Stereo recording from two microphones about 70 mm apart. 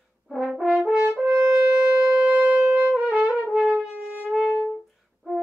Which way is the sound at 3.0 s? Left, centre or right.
Centre.